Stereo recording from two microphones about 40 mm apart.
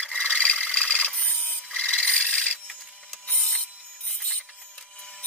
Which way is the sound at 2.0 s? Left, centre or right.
Left.